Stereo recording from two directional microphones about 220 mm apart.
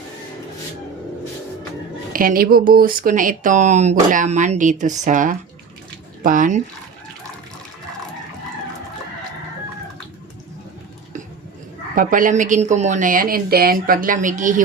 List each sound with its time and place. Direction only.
2.1 s speech: 40° right (ahead or behind)
11.9 s speech: 35° right (ahead or behind)